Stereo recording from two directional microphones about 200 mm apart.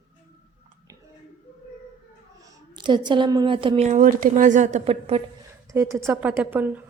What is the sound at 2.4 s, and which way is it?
A woman's voice, 20° right (ahead or behind).